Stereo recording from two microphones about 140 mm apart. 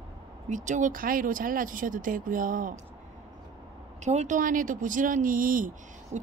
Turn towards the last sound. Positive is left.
turn(degrees=-75)  # may be behind; listen again after turning